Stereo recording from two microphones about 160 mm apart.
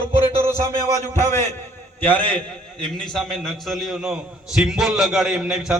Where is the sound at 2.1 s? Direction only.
5° left (ahead or behind).